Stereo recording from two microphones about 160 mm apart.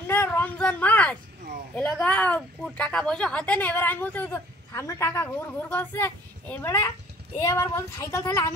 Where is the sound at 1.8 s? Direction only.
5° left (ahead or behind).